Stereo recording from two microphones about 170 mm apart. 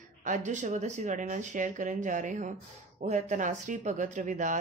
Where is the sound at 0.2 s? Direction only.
45° right (ahead or behind).